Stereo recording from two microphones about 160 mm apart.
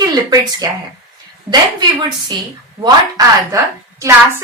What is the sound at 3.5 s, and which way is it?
Speech, 20° right (ahead or behind).